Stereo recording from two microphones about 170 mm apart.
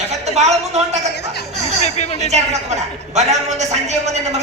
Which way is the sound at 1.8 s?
40° left (ahead or behind).